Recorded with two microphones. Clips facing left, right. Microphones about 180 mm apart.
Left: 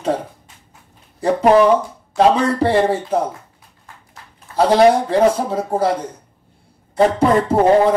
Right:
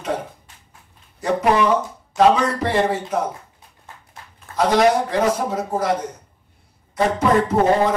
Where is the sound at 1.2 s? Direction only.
30° left (ahead or behind).